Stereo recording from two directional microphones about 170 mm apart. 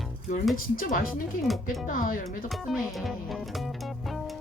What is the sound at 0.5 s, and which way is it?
Speech, 55° left (ahead or behind).